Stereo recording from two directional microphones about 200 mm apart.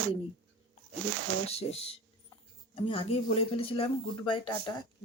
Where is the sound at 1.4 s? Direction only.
30° left (ahead or behind).